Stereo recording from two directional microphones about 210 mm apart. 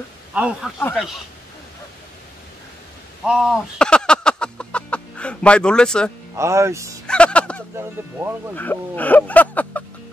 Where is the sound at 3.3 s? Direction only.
Centre (ahead or behind).